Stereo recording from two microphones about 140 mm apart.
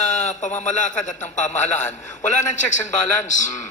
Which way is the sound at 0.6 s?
60° left (ahead or behind).